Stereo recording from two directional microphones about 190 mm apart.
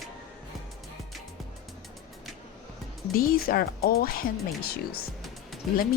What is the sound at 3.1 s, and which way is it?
Speech, 50° left (ahead or behind).